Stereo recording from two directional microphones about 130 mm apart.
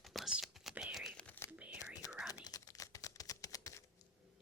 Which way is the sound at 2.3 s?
30° left (ahead or behind).